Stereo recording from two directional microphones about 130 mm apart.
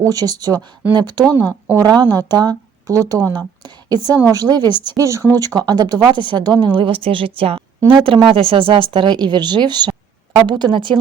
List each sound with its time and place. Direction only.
0.0 s a woman's voice: 30° right (ahead or behind)